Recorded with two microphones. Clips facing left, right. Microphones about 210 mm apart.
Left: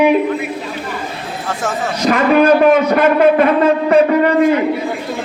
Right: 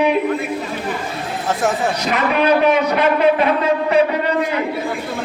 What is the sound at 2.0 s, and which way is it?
A man's voice, 50° left (ahead or behind).